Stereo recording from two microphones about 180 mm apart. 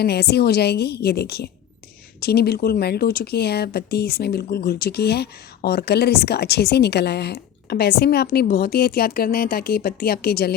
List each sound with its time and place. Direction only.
0.0 s speech: 65° left (ahead or behind)